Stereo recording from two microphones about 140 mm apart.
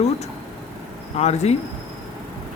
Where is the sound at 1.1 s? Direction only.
50° left (ahead or behind).